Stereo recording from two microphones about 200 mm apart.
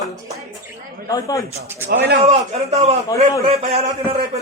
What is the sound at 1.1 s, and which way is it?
Speech, 15° left (ahead or behind).